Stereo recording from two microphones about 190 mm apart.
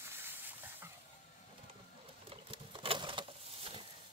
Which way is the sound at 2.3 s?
30° right (ahead or behind).